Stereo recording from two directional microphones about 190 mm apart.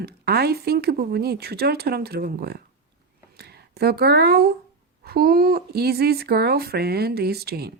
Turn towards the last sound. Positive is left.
turn(degrees=-55)  # may be behind; listen again after turning